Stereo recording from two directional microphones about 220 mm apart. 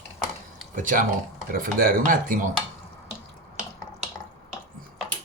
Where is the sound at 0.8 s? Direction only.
35° right (ahead or behind).